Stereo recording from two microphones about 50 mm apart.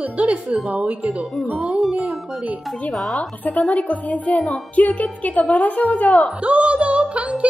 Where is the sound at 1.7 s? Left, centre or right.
Centre.